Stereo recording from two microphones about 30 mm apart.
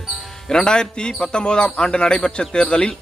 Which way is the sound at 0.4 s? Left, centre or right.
Left.